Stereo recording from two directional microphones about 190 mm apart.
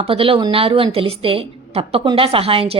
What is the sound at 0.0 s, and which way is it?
A woman's voice, 30° right (ahead or behind).